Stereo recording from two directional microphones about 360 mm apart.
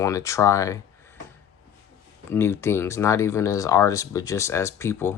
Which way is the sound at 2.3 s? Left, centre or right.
Centre.